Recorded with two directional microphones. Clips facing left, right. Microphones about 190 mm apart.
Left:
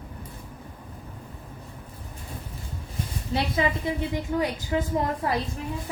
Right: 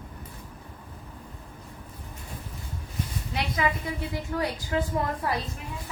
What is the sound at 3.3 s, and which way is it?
A woman's voice, 25° left (ahead or behind).